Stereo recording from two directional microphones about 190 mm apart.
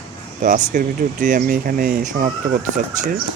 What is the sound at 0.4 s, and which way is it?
Speech, 45° right (ahead or behind).